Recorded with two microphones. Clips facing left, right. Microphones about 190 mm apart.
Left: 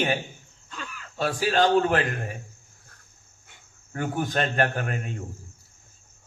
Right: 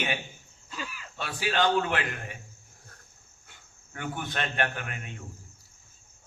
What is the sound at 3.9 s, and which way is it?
A man's voice, 40° left (ahead or behind).